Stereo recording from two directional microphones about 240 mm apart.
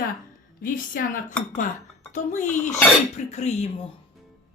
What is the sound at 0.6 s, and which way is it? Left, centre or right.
Speech, left.